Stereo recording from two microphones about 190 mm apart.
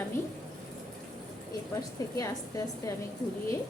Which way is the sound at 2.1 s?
20° left (ahead or behind).